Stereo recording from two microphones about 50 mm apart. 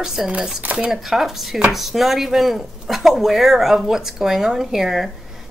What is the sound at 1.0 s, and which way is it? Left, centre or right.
Speech, centre.